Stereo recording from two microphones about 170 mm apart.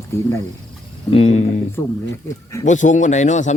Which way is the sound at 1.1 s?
35° left (ahead or behind).